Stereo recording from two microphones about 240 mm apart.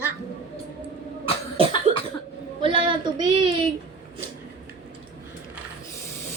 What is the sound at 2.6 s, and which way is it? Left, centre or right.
Speech, right.